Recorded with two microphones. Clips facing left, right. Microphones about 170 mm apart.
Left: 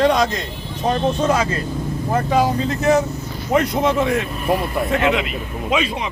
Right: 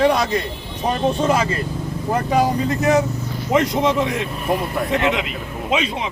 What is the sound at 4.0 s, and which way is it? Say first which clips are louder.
Speech: left 2 dB; 60° left (ahead or behind).